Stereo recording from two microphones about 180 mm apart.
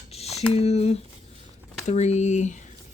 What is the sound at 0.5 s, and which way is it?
Speech, 35° left (ahead or behind).